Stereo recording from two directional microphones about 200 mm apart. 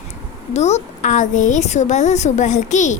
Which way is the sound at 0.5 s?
35° left (ahead or behind).